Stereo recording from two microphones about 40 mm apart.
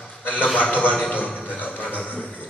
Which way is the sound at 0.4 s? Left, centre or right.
Left.